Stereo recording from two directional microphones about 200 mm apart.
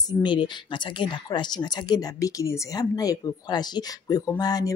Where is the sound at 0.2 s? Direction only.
25° left (ahead or behind).